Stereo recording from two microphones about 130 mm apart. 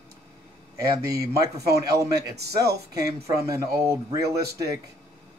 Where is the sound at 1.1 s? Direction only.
25° right (ahead or behind).